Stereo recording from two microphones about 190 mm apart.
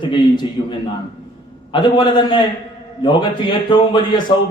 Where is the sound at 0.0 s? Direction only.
25° left (ahead or behind).